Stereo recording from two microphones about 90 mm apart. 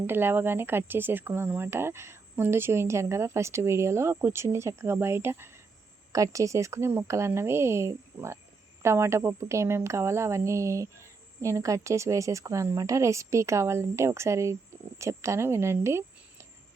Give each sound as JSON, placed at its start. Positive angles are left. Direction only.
{"t": 0.1, "sound": "speech", "side_deg": -25}